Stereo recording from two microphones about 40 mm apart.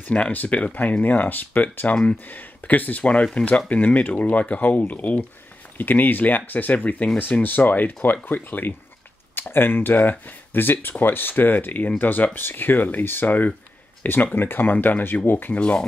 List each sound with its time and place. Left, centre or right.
0.3 s speech: left
12.4 s speech: left
15.5 s speech: left